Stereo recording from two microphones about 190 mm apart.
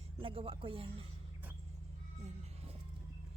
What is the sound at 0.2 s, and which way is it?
Speech, 30° right (ahead or behind).